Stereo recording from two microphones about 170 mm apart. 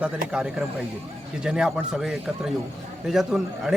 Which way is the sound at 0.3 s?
5° right (ahead or behind).